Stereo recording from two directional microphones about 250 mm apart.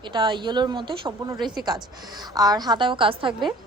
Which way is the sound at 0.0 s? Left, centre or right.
Centre.